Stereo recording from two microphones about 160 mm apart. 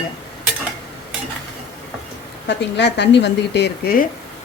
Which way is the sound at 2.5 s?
90° left.